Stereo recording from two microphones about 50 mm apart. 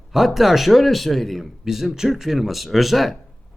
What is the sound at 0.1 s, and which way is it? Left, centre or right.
Speech, centre.